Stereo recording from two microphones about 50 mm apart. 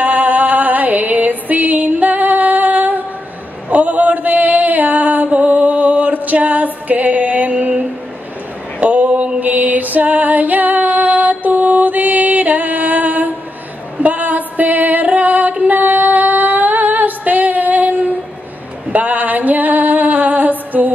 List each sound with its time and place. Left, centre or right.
0.0 s music: right
1.5 s female singing: right
3.7 s a sound: right
6.2 s music: right
13.9 s female singing: right